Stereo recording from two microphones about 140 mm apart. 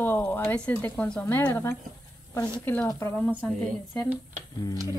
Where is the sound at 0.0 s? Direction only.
15° left (ahead or behind).